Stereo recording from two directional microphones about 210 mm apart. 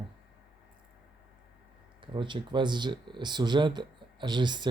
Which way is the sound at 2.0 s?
20° right (ahead or behind).